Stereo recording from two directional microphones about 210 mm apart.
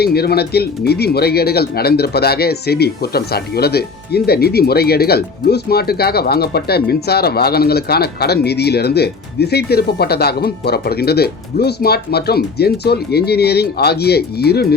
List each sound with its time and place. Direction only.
0.0 s speech: 50° left (ahead or behind)